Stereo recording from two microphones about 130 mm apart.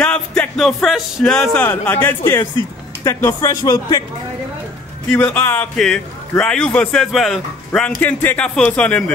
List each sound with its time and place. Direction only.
0.0 s speech: 10° left (ahead or behind)
1.6 s speech: 15° left (ahead or behind)
5.1 s a man's voice: 15° left (ahead or behind)
8.0 s speech: 15° left (ahead or behind)